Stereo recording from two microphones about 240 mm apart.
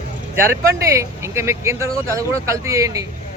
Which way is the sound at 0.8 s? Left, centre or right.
Centre.